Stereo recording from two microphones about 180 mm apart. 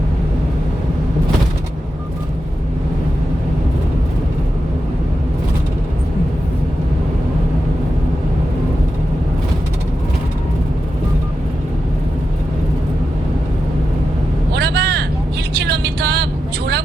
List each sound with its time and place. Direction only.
14.5 s vehicle: 65° right (ahead or behind)